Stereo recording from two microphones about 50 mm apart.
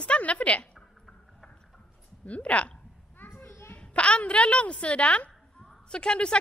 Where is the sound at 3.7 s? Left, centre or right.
Left.